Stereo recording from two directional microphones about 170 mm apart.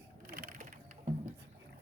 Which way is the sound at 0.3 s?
55° right (ahead or behind).